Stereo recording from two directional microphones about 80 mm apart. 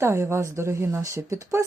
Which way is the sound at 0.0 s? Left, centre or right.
Right.